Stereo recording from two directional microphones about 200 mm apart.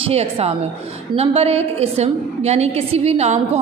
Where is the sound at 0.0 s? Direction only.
30° right (ahead or behind).